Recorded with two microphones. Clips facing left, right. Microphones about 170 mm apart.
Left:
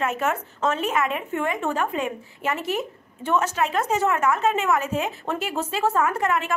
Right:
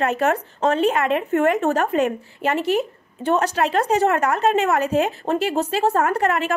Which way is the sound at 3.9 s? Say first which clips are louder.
Right 2 dB; 70° right (ahead or behind).